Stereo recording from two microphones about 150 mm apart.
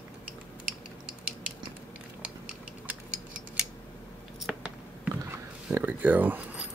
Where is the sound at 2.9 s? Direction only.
10° right (ahead or behind).